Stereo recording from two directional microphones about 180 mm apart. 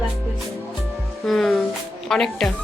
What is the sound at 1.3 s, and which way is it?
Speech, centre (ahead or behind).